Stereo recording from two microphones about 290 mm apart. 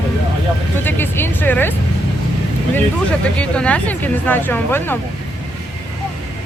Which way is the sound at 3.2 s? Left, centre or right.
Centre.